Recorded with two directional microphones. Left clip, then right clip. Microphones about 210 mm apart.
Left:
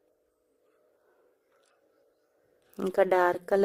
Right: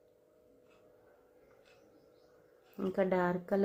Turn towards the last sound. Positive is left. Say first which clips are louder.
# left 8 dB
turn(degrees=45)  # may be behind; listen again after turning